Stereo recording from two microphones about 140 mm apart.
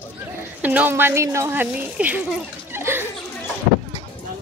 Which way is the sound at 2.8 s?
15° right (ahead or behind).